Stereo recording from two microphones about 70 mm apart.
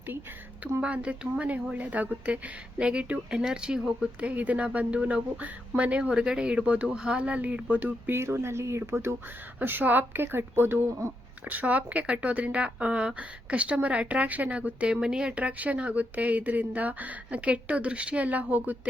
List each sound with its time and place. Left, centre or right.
0.8 s speech: centre
4.2 s speech: right
8.1 s speech: right
9.6 s speech: right
11.4 s speech: right